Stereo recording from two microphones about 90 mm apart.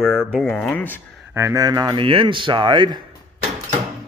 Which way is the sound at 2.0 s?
90° right.